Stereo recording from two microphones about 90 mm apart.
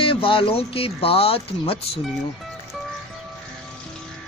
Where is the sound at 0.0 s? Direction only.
80° left.